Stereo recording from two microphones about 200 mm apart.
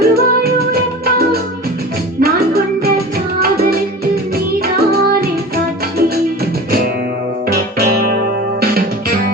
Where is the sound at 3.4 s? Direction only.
50° right (ahead or behind).